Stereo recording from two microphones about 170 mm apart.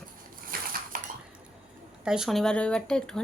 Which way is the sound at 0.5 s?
60° right (ahead or behind).